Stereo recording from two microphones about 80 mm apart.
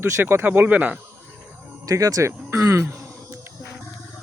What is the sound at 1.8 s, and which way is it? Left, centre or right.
Speech, right.